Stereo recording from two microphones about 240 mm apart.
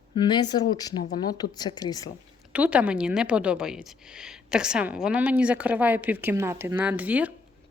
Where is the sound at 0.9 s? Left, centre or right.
Left.